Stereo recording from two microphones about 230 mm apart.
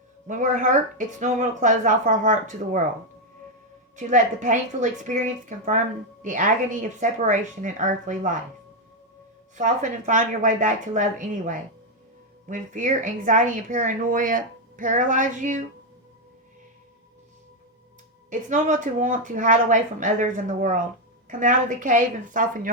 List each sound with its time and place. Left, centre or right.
0.3 s a woman's voice: right
3.9 s a woman's voice: right
9.6 s a woman's voice: right
18.3 s a woman's voice: right